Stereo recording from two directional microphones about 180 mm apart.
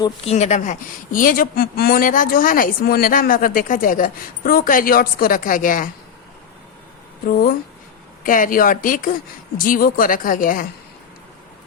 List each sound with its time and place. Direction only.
0.3 s speech: 40° left (ahead or behind)
7.3 s speech: 55° left (ahead or behind)